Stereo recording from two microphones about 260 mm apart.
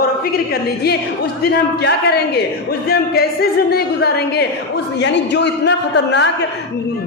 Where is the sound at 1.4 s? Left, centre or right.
Left.